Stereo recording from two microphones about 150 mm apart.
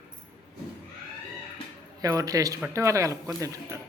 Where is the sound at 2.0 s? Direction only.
25° right (ahead or behind).